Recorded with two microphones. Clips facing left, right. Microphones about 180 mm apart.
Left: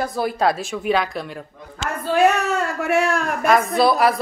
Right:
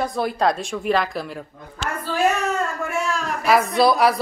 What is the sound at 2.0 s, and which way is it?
Speech, 70° left (ahead or behind).